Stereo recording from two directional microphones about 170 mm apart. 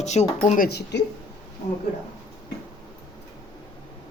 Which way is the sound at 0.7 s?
75° left (ahead or behind).